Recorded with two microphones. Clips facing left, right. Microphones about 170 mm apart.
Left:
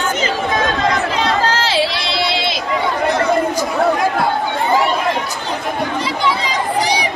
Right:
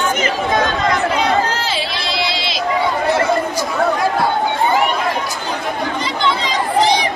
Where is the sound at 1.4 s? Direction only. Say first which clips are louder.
Left 4 dB; 90° left; by 2.4 s 75° left (ahead or behind).